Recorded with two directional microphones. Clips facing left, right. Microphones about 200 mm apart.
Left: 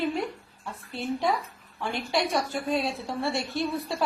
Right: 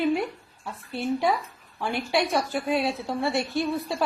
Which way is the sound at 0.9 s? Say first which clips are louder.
Right 3 dB; 5° right (ahead or behind).